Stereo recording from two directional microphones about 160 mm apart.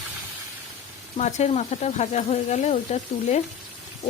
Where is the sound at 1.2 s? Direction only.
45° left (ahead or behind).